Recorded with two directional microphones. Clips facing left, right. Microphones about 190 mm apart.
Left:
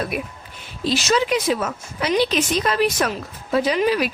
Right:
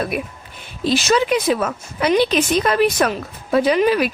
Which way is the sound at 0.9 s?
55° right (ahead or behind).